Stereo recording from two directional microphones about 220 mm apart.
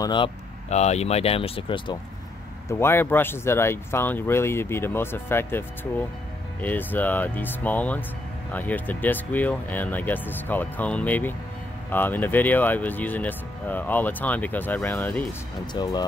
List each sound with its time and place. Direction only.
0.0 s speech: 20° left (ahead or behind)
2.8 s speech: 10° left (ahead or behind)
15.6 s speech: 20° left (ahead or behind)